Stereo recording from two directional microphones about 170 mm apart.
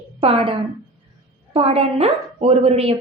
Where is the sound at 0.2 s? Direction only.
35° right (ahead or behind).